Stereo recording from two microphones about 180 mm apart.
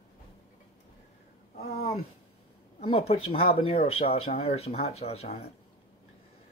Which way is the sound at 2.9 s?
35° left (ahead or behind).